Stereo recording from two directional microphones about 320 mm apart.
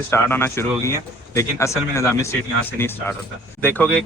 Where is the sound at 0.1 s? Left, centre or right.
Centre.